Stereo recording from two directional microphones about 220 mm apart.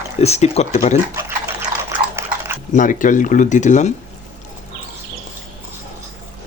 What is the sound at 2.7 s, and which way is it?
Speech, 35° left (ahead or behind).